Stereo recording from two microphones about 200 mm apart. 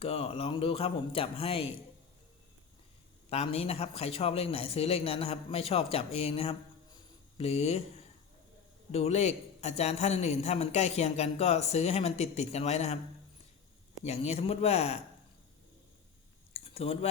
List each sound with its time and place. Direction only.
0.0 s a man's voice: 30° left (ahead or behind)
3.2 s a man's voice: 30° left (ahead or behind)
14.0 s a man's voice: 30° left (ahead or behind)
16.5 s a sound: 30° left (ahead or behind)